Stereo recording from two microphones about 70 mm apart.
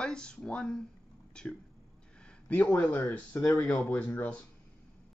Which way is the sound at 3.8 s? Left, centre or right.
Left.